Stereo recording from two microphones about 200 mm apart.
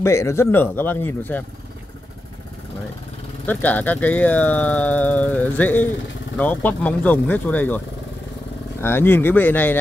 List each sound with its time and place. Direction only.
0.0 s speech: 15° left (ahead or behind)
3.4 s speech: 10° left (ahead or behind)
8.8 s speech: 10° left (ahead or behind)